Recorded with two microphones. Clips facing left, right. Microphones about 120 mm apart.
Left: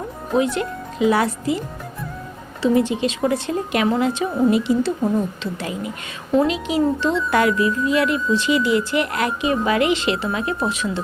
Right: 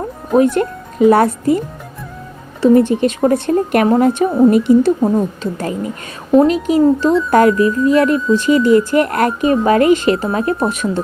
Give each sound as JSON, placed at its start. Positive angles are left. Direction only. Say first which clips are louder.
{"t": 0.3, "sound": "speech", "louder": "right 7 dB", "side_deg": -50}